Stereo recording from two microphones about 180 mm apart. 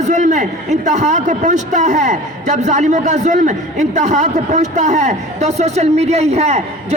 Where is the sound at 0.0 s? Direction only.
40° right (ahead or behind).